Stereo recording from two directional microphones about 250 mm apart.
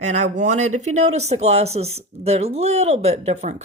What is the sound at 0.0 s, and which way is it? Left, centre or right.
Speech, right.